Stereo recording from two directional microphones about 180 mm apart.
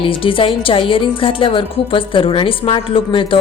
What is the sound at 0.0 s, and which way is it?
A woman's voice, 30° left (ahead or behind).